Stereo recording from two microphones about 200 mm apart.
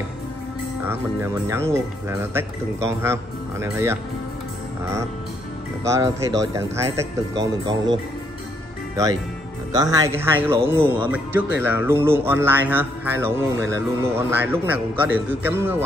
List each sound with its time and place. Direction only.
0.8 s speech: 15° right (ahead or behind)
5.9 s speech: 15° right (ahead or behind)
9.7 s speech: 20° right (ahead or behind)